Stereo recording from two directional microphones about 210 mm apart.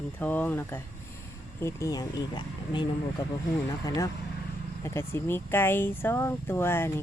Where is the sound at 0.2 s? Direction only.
10° left (ahead or behind).